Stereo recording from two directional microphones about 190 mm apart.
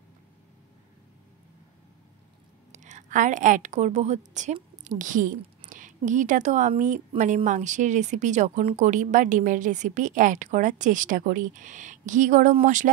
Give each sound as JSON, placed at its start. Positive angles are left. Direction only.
{"t": 2.7, "sound": "a woman's voice", "side_deg": -40}